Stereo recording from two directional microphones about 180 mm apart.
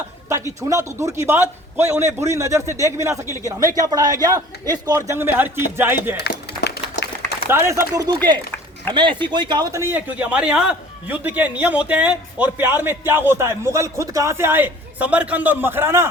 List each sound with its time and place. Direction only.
0.7 s speech: 15° right (ahead or behind)
6.1 s a sound: 65° left (ahead or behind)
7.4 s speech: 15° right (ahead or behind)